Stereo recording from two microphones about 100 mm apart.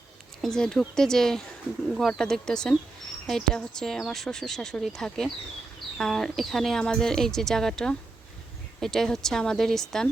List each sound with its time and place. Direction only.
0.4 s a woman's voice: 5° left (ahead or behind)